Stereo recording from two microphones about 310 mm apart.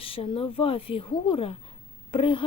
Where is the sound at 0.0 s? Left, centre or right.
Centre.